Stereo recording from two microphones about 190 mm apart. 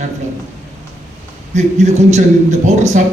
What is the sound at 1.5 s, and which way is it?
A man's voice, 40° right (ahead or behind).